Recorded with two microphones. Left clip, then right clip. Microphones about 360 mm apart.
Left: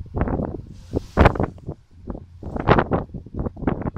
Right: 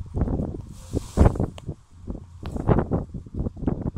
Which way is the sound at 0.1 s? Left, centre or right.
Left.